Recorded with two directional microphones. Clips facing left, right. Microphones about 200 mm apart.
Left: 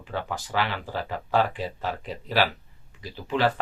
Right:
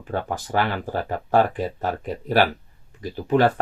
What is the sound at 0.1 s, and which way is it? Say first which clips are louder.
Speech: right 5 dB; 50° right (ahead or behind).